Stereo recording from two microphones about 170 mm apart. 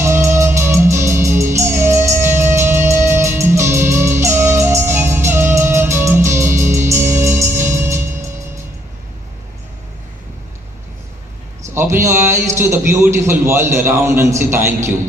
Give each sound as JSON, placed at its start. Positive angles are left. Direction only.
{"t": 0.0, "sound": "music", "side_deg": -15}
{"t": 11.6, "sound": "a man's voice", "side_deg": -15}